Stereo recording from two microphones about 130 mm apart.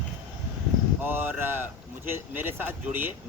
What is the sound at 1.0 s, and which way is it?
Speech, 15° right (ahead or behind).